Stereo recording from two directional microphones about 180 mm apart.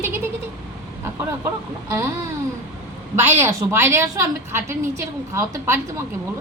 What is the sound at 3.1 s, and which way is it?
A woman's voice, 15° right (ahead or behind).